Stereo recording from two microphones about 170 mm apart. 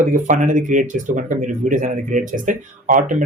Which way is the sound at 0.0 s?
50° right (ahead or behind).